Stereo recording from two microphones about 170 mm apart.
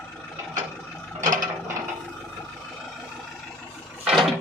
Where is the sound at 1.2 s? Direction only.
50° right (ahead or behind).